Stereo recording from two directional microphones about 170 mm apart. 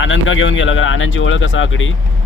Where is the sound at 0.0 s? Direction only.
90° left.